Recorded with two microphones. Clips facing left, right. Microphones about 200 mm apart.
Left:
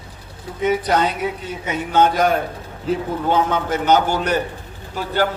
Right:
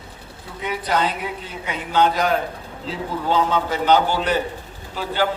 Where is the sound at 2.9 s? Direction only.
50° left (ahead or behind).